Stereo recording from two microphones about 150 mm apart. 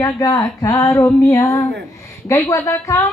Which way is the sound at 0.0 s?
25° left (ahead or behind).